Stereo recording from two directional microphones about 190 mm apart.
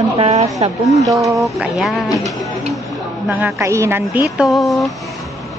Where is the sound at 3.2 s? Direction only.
10° right (ahead or behind).